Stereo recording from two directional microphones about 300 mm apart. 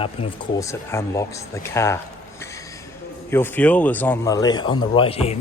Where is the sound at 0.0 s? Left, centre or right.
Centre.